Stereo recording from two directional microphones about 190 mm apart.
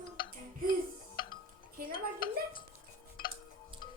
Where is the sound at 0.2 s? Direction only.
25° left (ahead or behind).